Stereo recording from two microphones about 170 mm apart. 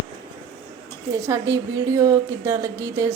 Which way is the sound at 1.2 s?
20° right (ahead or behind).